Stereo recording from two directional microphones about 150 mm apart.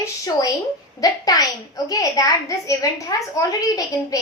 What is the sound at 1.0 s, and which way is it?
A woman's voice, 25° left (ahead or behind).